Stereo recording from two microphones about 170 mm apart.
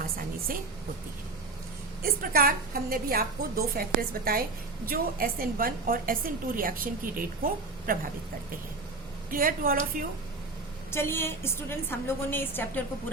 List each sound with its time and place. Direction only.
2.0 s a woman's voice: 60° right (ahead or behind)
9.3 s a woman's voice: 55° right (ahead or behind)
10.9 s a woman's voice: 15° left (ahead or behind)